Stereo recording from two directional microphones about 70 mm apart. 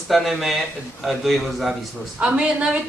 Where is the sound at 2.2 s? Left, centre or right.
Centre.